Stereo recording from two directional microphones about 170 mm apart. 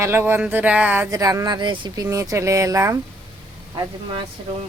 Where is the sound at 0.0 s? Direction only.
15° right (ahead or behind).